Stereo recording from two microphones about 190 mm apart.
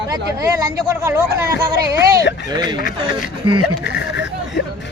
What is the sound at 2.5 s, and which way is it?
Speech, 20° right (ahead or behind).